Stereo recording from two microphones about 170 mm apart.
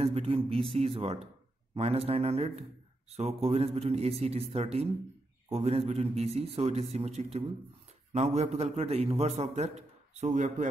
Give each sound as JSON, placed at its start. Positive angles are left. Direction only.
{"t": 0.0, "sound": "a man's voice", "side_deg": -35}